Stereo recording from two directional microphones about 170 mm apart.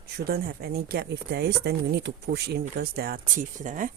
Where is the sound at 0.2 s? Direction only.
65° right (ahead or behind).